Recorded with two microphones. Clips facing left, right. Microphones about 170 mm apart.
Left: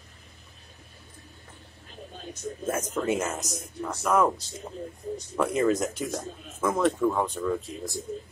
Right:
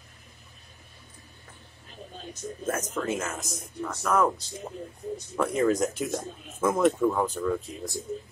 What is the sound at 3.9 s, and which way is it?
Speech, 5° left (ahead or behind).